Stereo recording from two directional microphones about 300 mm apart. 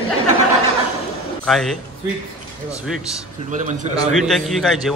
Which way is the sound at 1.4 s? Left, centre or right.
Centre.